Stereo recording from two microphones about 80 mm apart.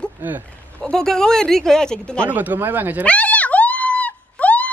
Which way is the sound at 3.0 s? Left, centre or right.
Centre.